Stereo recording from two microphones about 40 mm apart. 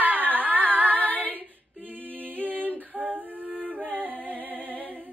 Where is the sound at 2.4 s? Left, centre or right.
Right.